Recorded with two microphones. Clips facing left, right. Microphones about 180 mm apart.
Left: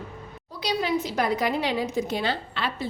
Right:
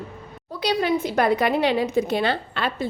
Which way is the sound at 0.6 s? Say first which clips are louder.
Right 4 dB; 60° right (ahead or behind).